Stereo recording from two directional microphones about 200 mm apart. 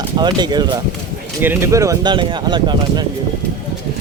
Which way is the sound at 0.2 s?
20° right (ahead or behind).